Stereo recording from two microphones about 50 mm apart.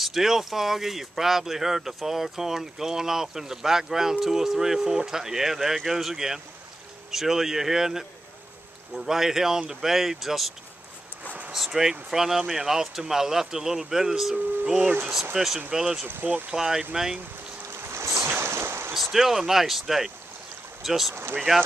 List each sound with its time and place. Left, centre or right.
0.0 s speech: centre
11.5 s speech: centre
14.7 s speech: right
15.3 s speech: centre
16.1 s speech: right
16.5 s speech: centre
17.9 s boat: right
18.3 s boat: right
18.9 s speech: centre
21.1 s speech: right